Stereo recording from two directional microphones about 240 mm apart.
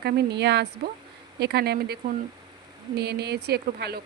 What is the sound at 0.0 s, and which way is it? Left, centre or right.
Speech, right.